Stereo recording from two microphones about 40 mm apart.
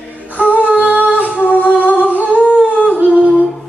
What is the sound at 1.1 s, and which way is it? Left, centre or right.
Humming, right.